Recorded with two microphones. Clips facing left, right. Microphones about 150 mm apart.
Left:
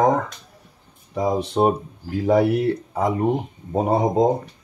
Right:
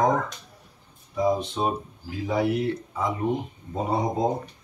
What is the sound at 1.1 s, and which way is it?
Speech, 70° left (ahead or behind).